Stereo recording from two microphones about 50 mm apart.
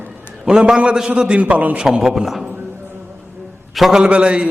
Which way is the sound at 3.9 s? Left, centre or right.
Right.